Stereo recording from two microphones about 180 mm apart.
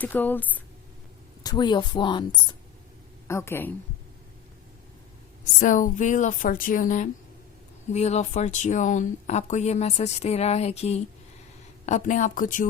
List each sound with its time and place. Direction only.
0.0 s speech: 10° left (ahead or behind)
1.5 s speech: 25° left (ahead or behind)
3.2 s speech: 15° left (ahead or behind)
5.5 s speech: 45° left (ahead or behind)